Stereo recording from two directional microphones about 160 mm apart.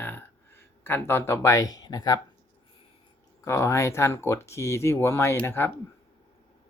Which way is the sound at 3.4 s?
15° left (ahead or behind).